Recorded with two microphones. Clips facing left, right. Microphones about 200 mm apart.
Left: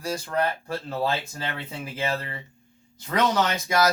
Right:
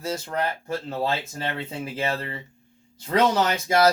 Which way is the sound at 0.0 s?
20° right (ahead or behind).